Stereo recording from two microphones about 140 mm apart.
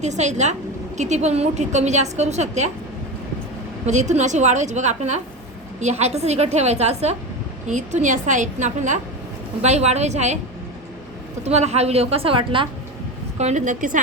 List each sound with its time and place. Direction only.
0.0 s a woman's voice: 55° right (ahead or behind)
3.8 s a woman's voice: 55° right (ahead or behind)
11.4 s a woman's voice: 50° right (ahead or behind)
13.4 s a woman's voice: 60° right (ahead or behind)